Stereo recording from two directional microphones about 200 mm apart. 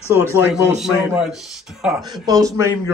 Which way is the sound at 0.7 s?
Centre (ahead or behind).